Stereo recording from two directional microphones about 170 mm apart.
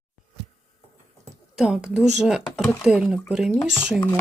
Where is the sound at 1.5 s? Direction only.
5° right (ahead or behind).